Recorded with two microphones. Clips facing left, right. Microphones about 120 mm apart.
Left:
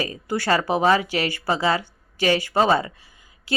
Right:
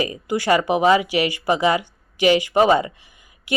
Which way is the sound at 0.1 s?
15° right (ahead or behind).